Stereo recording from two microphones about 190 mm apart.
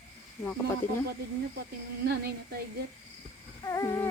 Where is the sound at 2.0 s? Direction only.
55° right (ahead or behind).